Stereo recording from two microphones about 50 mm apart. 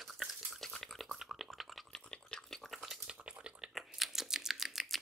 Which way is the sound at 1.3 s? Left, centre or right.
Centre.